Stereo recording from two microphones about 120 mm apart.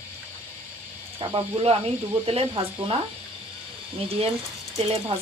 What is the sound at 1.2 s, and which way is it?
Speech, 55° right (ahead or behind).